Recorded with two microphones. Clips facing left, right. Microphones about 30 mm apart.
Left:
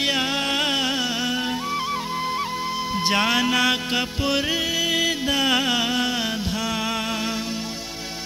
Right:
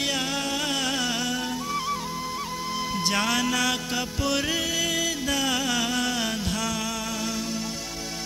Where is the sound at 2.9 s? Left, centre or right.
Left.